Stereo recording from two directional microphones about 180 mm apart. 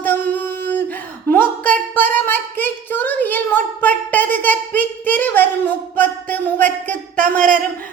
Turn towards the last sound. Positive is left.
turn(degrees=-45)  # may be behind; listen again after turning